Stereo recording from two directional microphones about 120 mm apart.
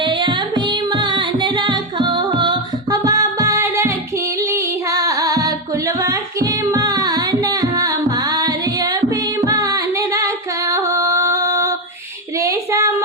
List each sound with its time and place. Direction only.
0.0 s singing: 40° right (ahead or behind)
3.0 s music: 30° right (ahead or behind)
6.0 s singing: 30° right (ahead or behind)
12.4 s a sound: 25° right (ahead or behind)